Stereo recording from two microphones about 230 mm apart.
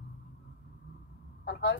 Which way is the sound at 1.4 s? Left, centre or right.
Left.